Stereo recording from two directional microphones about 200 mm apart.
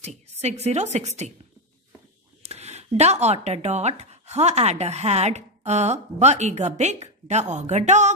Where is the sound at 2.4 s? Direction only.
30° right (ahead or behind).